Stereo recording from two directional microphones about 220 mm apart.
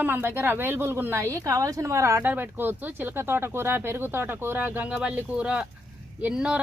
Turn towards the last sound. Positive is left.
turn(degrees=-5)  # may be behind; listen again after turning